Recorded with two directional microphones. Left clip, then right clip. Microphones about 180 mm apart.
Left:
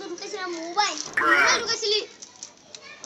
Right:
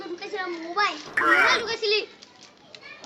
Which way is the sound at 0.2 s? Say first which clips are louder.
Right 1 dB; 5° left (ahead or behind).